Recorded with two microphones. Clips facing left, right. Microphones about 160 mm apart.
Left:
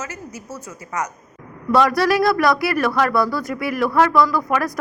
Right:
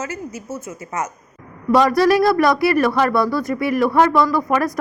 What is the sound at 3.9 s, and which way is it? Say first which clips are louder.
Speech: left 1 dB; 20° right (ahead or behind).